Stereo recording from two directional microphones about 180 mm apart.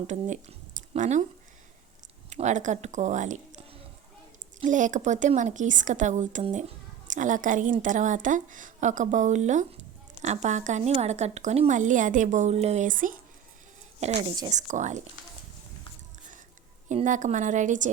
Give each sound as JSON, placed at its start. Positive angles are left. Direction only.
{"t": 0.1, "sound": "speech", "side_deg": -40}
{"t": 2.3, "sound": "a woman's voice", "side_deg": -40}
{"t": 14.2, "sound": "speech", "side_deg": -25}
{"t": 14.5, "sound": "a woman's voice", "side_deg": -40}
{"t": 16.9, "sound": "a woman's voice", "side_deg": -45}